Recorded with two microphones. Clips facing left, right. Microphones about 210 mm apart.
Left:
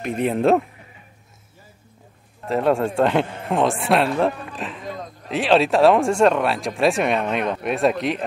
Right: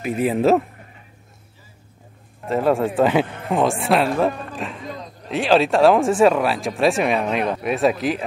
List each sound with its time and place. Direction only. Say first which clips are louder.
0.0 s speech: right 1 dB; 5° right (ahead or behind)
2.4 s speech: right 1 dB; centre (ahead or behind)